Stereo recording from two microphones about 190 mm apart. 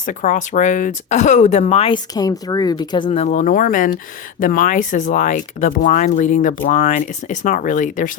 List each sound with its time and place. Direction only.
0.0 s speech: 40° left (ahead or behind); by 3.1 s 20° left (ahead or behind)
3.1 s speech: 35° left (ahead or behind)